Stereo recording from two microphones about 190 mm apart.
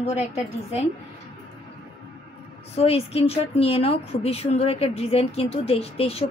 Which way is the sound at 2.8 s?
30° left (ahead or behind).